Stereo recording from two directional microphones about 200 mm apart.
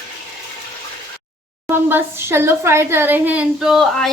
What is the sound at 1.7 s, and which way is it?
A woman's voice, 10° right (ahead or behind).